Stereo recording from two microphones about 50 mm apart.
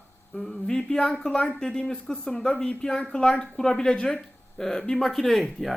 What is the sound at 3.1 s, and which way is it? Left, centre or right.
Speech, centre.